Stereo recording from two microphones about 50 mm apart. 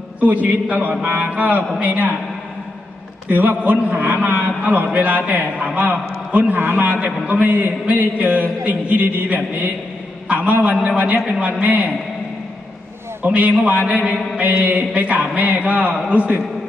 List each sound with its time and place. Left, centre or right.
0.2 s a man's voice: right
3.3 s a man's voice: right
13.2 s a man's voice: right